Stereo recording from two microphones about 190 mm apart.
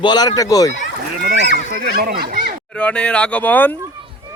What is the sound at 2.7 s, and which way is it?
Speech, 5° left (ahead or behind).